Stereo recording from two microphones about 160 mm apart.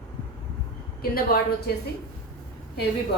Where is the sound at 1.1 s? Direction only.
70° left (ahead or behind).